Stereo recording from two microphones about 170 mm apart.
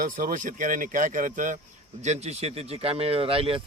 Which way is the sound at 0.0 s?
50° right (ahead or behind).